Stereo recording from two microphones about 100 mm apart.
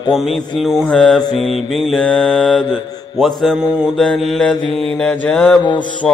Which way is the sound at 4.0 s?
5° left (ahead or behind).